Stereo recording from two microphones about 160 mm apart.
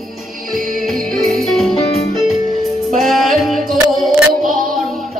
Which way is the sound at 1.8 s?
40° left (ahead or behind).